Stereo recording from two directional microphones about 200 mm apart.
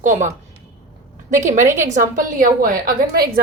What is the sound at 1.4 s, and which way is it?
A woman's voice, 40° right (ahead or behind).